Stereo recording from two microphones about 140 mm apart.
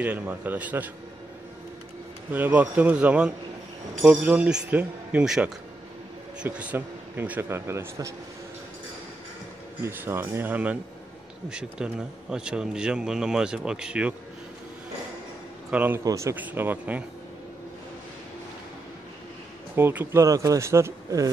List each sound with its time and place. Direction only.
0.0 s speech: 10° right (ahead or behind)
2.3 s speech: 10° right (ahead or behind)
9.8 s speech: 15° right (ahead or behind)
15.7 s speech: 10° right (ahead or behind)
16.0 s speech: 25° right (ahead or behind)
19.7 s speech: 15° right (ahead or behind)